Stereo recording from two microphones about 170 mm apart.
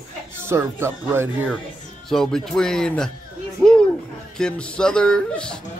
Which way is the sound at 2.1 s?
Centre (ahead or behind).